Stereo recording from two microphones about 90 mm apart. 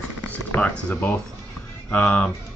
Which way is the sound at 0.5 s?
15° left (ahead or behind).